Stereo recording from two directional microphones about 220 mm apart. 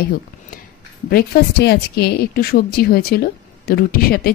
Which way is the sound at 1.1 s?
45° left (ahead or behind).